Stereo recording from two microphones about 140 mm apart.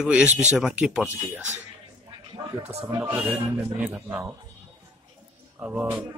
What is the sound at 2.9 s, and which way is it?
A man's voice, 10° right (ahead or behind).